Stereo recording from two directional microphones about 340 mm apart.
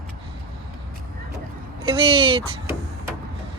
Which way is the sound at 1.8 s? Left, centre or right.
Centre.